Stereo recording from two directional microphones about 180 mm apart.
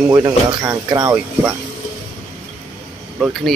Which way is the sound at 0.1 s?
20° right (ahead or behind).